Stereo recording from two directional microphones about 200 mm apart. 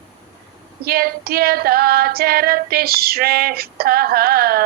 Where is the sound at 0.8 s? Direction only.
50° right (ahead or behind).